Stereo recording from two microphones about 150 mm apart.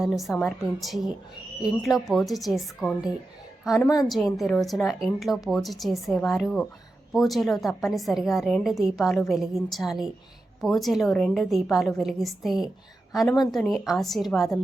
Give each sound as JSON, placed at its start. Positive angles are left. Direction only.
{"t": 0.0, "sound": "a woman's voice", "side_deg": 0}
{"t": 3.8, "sound": "a woman's voice", "side_deg": 25}
{"t": 4.1, "sound": "a woman's voice", "side_deg": 0}